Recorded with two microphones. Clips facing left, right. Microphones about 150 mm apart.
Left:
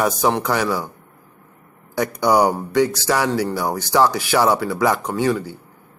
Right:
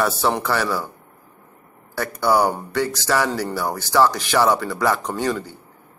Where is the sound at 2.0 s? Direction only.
15° left (ahead or behind).